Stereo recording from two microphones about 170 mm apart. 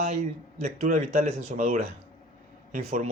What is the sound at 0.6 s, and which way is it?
Speech, 45° right (ahead or behind).